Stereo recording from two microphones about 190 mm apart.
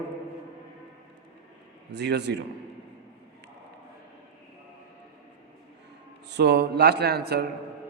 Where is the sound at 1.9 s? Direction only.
65° right (ahead or behind).